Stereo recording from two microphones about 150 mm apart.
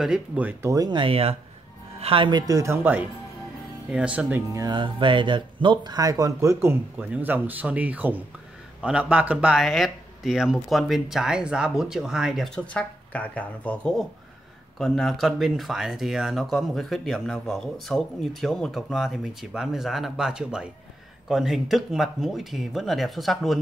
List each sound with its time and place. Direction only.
0.0 s speech: 5° right (ahead or behind)
4.5 s speech: 25° right (ahead or behind); by 23.6 s centre (ahead or behind)